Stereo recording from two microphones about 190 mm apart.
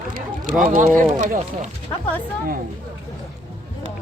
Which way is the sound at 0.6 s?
45° right (ahead or behind).